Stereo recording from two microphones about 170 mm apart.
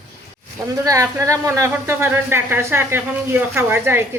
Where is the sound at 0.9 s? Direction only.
20° right (ahead or behind).